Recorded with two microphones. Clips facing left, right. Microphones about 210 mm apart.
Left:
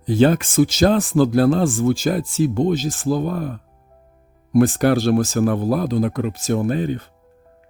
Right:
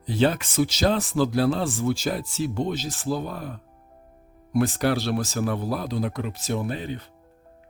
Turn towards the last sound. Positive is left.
turn(degrees=50)  # may be behind; listen again after turning